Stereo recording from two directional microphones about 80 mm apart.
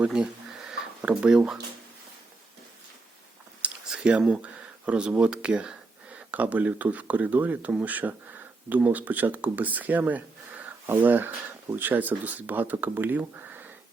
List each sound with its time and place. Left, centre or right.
0.0 s speech: centre
3.6 s a sound: centre
4.3 s speech: centre